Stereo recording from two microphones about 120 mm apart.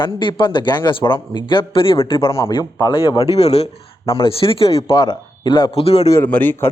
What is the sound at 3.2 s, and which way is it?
Speech, 60° left (ahead or behind).